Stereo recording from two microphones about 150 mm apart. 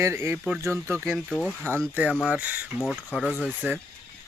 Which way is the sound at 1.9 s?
5° right (ahead or behind).